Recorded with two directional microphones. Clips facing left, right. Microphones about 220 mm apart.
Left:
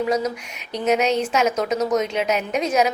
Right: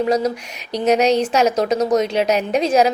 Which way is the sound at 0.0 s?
35° right (ahead or behind).